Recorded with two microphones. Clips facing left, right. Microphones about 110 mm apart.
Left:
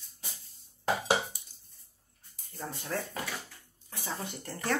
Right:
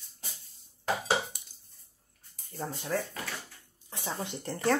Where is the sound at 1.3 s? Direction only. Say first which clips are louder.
Right 2 dB; 60° right (ahead or behind).